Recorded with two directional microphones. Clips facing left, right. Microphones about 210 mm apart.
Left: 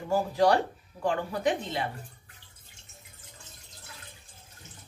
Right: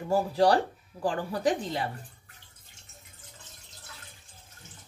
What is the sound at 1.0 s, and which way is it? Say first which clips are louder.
Speech: even; 35° right (ahead or behind).